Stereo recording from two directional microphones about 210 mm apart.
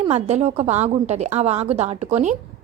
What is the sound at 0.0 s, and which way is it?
Speech, 30° right (ahead or behind).